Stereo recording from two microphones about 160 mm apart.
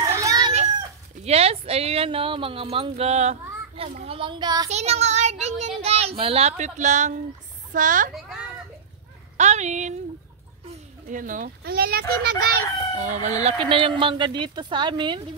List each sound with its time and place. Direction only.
0.0 s chicken: 20° right (ahead or behind)
1.2 s speech: 40° right (ahead or behind)
4.6 s a child's voice: 45° right (ahead or behind)
9.4 s a child's voice: 45° right (ahead or behind); by 12.4 s 80° right
12.9 s speech: 50° right (ahead or behind); by 15.2 s 30° right (ahead or behind)